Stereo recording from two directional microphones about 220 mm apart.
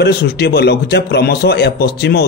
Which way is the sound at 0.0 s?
50° left (ahead or behind).